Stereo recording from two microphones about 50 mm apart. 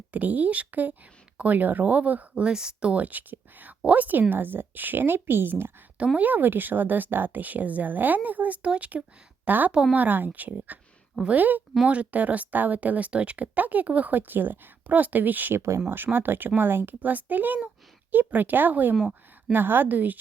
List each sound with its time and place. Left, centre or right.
0.1 s speech: right
2.4 s speech: centre
2.9 s speech: right
6.1 s speech: right
15.5 s speech: right
16.1 s speech: right
17.0 s speech: right